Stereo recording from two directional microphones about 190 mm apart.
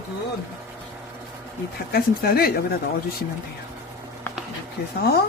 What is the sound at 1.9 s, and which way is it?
Speech, 55° left (ahead or behind).